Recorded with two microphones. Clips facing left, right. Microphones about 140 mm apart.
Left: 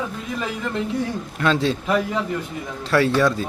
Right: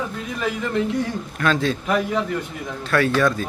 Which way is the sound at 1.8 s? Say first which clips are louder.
Right 2 dB; centre (ahead or behind).